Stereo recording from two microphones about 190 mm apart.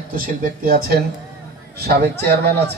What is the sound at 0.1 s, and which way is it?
Speech, 50° right (ahead or behind).